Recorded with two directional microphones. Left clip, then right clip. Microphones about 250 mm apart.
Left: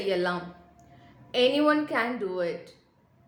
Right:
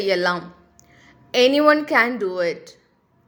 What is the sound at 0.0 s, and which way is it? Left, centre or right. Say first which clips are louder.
A woman's voice: right 7 dB; right.